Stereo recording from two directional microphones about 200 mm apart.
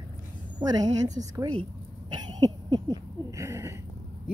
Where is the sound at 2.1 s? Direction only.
20° right (ahead or behind).